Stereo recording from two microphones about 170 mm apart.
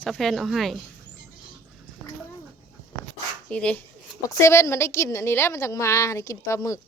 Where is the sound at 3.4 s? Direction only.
5° left (ahead or behind).